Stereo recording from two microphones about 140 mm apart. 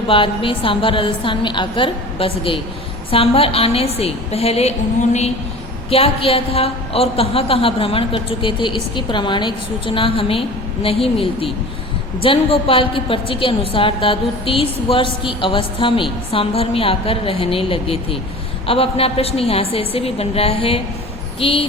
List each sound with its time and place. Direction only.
0.1 s a woman's voice: 40° left (ahead or behind)
5.9 s a woman's voice: 45° left (ahead or behind)